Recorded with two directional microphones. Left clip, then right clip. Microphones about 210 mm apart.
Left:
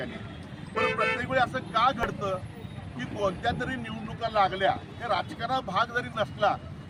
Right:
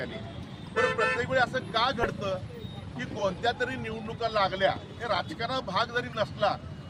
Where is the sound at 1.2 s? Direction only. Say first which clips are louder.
Even; centre (ahead or behind).